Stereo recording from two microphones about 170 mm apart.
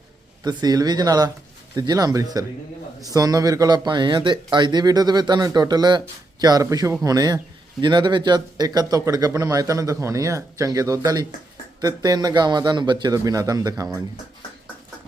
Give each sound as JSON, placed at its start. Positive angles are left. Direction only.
{"t": 0.4, "sound": "a man's voice", "side_deg": -20}